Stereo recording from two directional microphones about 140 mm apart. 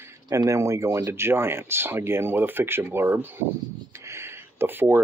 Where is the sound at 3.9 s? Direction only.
20° right (ahead or behind).